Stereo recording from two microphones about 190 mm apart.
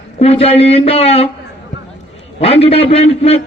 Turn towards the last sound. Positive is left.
turn(degrees=30)  # may be behind; listen again after turning